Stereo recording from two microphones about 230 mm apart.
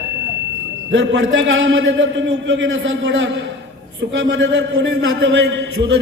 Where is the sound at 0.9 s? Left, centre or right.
Right.